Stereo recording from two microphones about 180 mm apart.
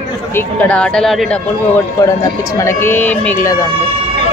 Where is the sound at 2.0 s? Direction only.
15° left (ahead or behind).